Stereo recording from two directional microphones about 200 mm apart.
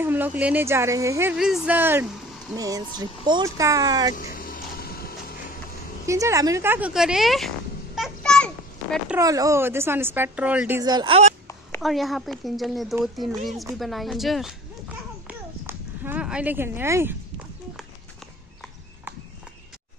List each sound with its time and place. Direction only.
0.0 s speech: 10° right (ahead or behind)
1.3 s speech: 5° right (ahead or behind)
4.1 s a sound: 45° left (ahead or behind)
6.0 s speech: 15° right (ahead or behind); by 8.5 s 5° left (ahead or behind)
9.1 s speech: 15° right (ahead or behind)
10.8 s speech: 20° right (ahead or behind)
11.8 s a child's voice: centre (ahead or behind)